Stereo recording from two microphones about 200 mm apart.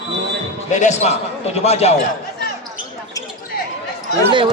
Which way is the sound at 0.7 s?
35° left (ahead or behind).